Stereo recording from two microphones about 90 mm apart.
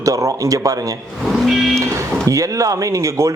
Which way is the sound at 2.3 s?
35° right (ahead or behind).